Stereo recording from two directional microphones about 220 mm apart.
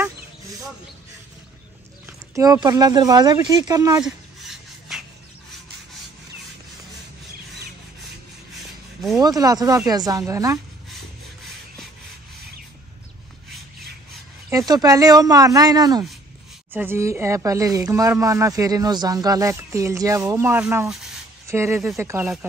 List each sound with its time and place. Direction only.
2.0 s speech: 15° right (ahead or behind)
4.0 s a sound: centre (ahead or behind)
9.1 s speech: 15° right (ahead or behind)
14.7 s speech: 15° right (ahead or behind)